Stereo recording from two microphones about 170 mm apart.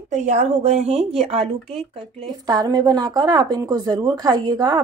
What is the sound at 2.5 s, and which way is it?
A woman's voice, 20° right (ahead or behind).